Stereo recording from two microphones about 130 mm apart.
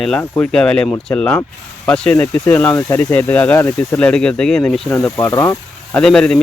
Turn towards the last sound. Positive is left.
turn(degrees=5)  # may be behind; listen again after turning